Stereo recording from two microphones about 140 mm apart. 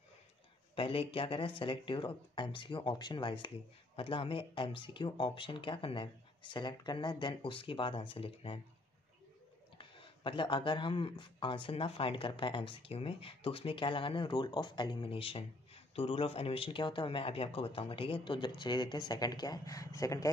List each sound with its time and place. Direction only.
0.7 s speech: 40° left (ahead or behind)
9.8 s speech: 35° left (ahead or behind)